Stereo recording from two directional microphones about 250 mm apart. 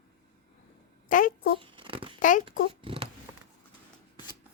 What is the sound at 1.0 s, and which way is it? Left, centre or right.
Speech, left.